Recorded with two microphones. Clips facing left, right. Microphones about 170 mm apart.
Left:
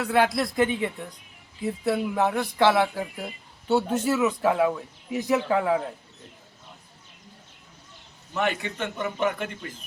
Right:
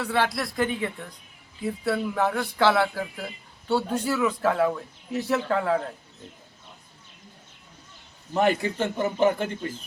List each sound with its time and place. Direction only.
0.0 s speech: 10° left (ahead or behind)
2.2 s speech: 5° left (ahead or behind)
2.6 s speech: 15° left (ahead or behind)
4.1 s speech: 10° left (ahead or behind)
8.3 s a man's voice: 35° right (ahead or behind)